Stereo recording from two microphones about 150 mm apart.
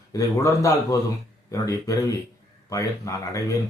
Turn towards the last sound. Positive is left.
turn(degrees=20)  # may be behind; listen again after turning